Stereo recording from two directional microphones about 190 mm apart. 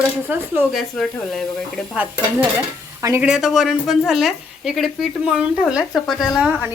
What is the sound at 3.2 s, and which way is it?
A woman's voice, centre (ahead or behind).